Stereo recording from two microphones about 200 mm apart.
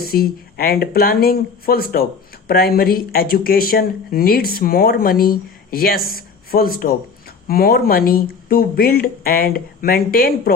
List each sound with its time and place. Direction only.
0.0 s speech: 50° left (ahead or behind)